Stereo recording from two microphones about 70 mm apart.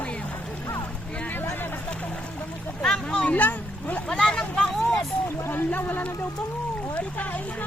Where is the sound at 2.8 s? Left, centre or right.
Centre.